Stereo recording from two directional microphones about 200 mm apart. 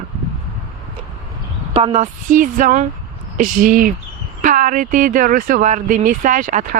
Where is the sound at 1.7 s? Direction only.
30° right (ahead or behind).